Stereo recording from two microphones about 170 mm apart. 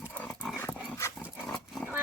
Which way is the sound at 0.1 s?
10° left (ahead or behind).